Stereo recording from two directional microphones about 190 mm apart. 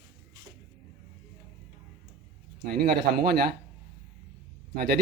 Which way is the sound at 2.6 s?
55° right (ahead or behind).